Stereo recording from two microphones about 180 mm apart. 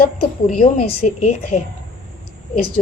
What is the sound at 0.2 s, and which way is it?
A woman's voice, 50° left (ahead or behind).